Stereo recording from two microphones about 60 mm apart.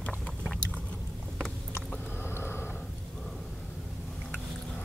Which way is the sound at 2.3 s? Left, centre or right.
Left.